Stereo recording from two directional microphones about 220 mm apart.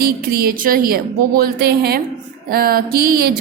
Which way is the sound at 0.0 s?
45° right (ahead or behind).